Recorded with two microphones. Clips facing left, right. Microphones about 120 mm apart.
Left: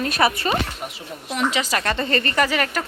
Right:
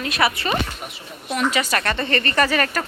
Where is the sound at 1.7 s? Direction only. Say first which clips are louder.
Even; 15° left (ahead or behind).